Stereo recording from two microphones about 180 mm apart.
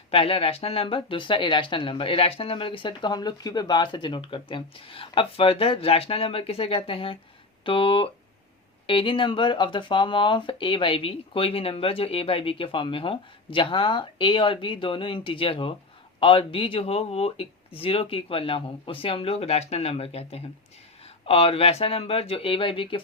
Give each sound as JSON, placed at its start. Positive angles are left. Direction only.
{"t": 0.1, "sound": "speech", "side_deg": 30}